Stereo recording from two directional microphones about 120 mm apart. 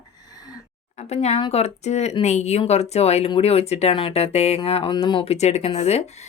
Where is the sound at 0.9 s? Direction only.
65° left (ahead or behind).